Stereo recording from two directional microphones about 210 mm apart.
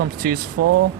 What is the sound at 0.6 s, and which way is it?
Speech, 90° right.